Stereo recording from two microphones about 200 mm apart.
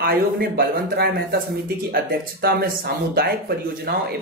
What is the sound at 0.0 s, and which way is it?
Speech, 50° right (ahead or behind).